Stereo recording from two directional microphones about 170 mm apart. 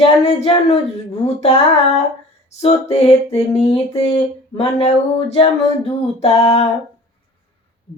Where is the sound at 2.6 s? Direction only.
35° left (ahead or behind).